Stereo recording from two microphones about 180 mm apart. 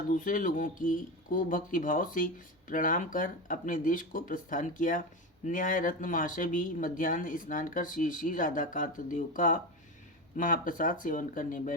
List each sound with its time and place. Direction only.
0.1 s speech: 50° left (ahead or behind)